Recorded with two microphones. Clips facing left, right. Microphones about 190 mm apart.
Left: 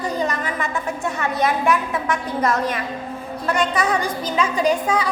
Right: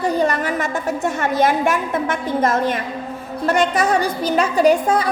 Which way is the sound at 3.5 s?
50° right (ahead or behind).